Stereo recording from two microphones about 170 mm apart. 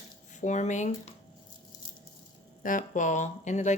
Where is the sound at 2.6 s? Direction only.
50° left (ahead or behind).